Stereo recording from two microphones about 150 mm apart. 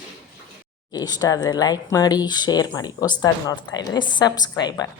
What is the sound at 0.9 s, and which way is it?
A woman's voice, 25° left (ahead or behind).